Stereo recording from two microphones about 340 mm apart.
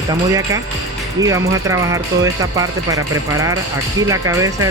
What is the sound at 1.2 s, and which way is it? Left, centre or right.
Speech, centre.